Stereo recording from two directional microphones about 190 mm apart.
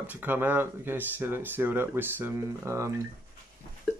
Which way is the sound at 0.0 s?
10° right (ahead or behind).